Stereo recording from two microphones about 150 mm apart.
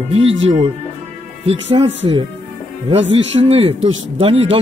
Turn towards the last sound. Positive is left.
turn(degrees=-40)  # may be behind; listen again after turning